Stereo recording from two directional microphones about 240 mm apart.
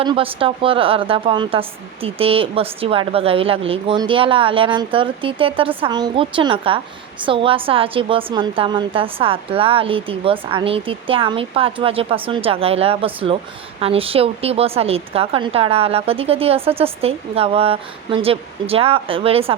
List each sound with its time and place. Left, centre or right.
0.0 s a woman's voice: right